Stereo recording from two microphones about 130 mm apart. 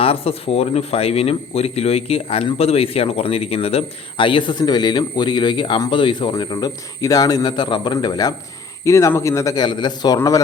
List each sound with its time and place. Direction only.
0.0 s speech: 50° left (ahead or behind); by 10.4 s 25° left (ahead or behind)